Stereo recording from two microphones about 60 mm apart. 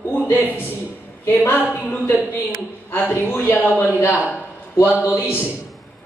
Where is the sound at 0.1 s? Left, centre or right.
Left.